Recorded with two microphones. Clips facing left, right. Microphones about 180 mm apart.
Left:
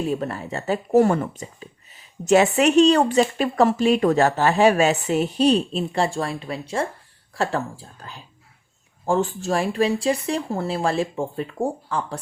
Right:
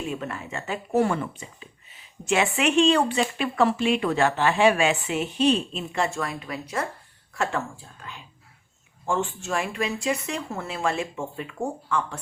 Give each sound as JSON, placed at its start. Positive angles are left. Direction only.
{"t": 0.0, "sound": "speech", "side_deg": 40}